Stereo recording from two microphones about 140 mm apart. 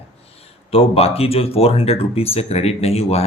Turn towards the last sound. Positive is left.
turn(degrees=45)  # may be behind; listen again after turning